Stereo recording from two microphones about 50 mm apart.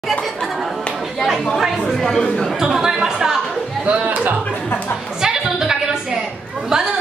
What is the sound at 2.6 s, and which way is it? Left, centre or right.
Speech, centre.